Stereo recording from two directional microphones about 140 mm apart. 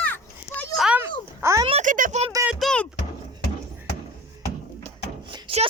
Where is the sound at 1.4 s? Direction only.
20° right (ahead or behind).